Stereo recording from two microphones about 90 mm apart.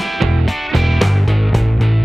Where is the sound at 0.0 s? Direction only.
Centre (ahead or behind).